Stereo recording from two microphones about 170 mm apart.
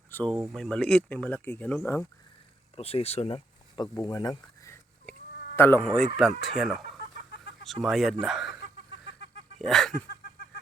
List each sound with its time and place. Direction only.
0.1 s speech: 10° left (ahead or behind)
2.7 s speech: 35° left (ahead or behind)
3.8 s speech: 20° left (ahead or behind); by 8.5 s centre (ahead or behind)
9.6 s a sound: centre (ahead or behind)